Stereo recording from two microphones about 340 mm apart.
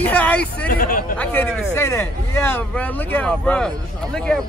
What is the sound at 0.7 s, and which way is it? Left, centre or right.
Speech, left.